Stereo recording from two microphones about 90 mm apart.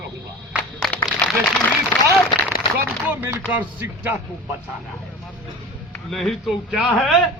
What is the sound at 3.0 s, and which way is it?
Speech, 20° right (ahead or behind).